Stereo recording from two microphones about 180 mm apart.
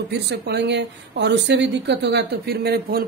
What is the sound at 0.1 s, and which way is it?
A woman's voice, 65° right (ahead or behind).